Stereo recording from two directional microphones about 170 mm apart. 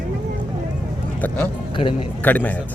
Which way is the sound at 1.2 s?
10° left (ahead or behind).